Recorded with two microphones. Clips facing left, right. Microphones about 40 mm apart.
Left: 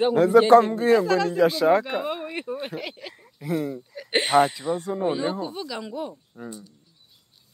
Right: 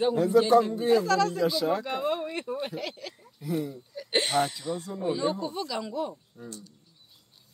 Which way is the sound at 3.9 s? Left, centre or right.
Left.